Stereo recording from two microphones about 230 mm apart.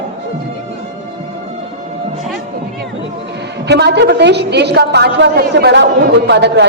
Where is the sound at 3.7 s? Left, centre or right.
Right.